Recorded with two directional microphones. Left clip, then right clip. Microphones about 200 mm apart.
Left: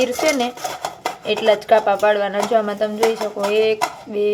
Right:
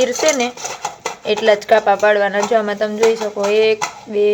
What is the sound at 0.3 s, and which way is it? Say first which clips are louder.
Speech: right 2 dB; centre (ahead or behind).